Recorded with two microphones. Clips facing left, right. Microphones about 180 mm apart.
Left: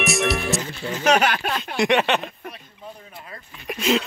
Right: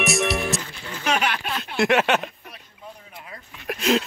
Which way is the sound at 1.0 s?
40° left (ahead or behind).